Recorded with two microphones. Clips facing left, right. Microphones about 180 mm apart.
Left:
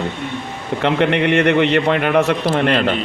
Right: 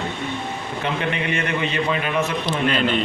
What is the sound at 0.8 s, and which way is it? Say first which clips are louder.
A man's voice: left 9 dB; 70° left (ahead or behind).